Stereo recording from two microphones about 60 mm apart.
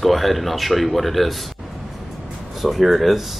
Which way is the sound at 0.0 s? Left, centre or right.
Centre.